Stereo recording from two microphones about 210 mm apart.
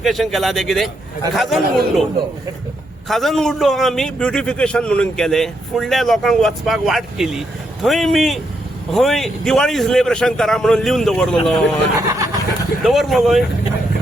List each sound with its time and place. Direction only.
0.0 s a man's voice: centre (ahead or behind)
3.1 s a man's voice: centre (ahead or behind)
11.9 s speech: 15° right (ahead or behind)
12.8 s a man's voice: centre (ahead or behind)